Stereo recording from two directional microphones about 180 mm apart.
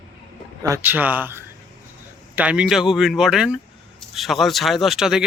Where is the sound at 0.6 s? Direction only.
15° right (ahead or behind).